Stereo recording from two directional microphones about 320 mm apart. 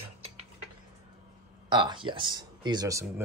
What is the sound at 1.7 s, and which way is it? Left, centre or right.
Speech, centre.